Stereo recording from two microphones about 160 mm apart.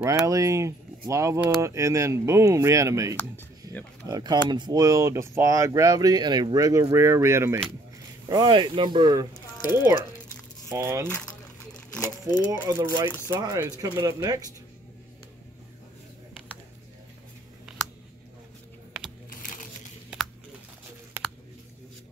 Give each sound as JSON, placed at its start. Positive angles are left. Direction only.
{"t": 0.0, "sound": "speech", "side_deg": -20}
{"t": 8.3, "sound": "speech", "side_deg": -25}
{"t": 12.0, "sound": "speech", "side_deg": 25}
{"t": 12.4, "sound": "speech", "side_deg": -20}
{"t": 19.3, "sound": "crumpling", "side_deg": 55}